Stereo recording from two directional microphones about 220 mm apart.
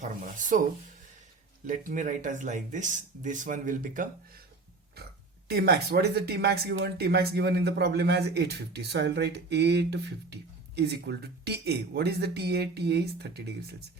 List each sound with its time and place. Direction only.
0.0 s speech: 35° right (ahead or behind)
1.6 s speech: 35° right (ahead or behind)
5.5 s speech: 45° right (ahead or behind)